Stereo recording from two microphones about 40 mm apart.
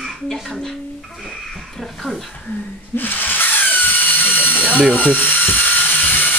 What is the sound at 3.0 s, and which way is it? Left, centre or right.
Rub, left.